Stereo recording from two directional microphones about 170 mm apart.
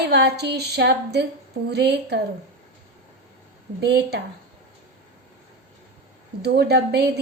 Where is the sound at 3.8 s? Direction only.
80° right.